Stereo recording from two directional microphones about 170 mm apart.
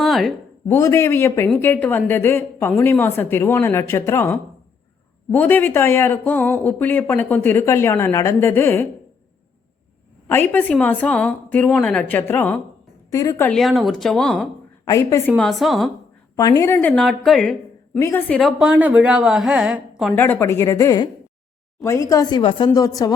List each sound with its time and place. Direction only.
0.0 s a sound: centre (ahead or behind)
0.7 s speech: 15° left (ahead or behind)
10.2 s a woman's voice: 10° left (ahead or behind)
13.5 s a woman's voice: centre (ahead or behind)
14.8 s speech: 15° left (ahead or behind)
15.4 s a woman's voice: centre (ahead or behind)
16.3 s speech: 20° left (ahead or behind)
16.9 s a woman's voice: 5° left (ahead or behind)
18.3 s a woman's voice: centre (ahead or behind)
20.1 s speech: 10° left (ahead or behind)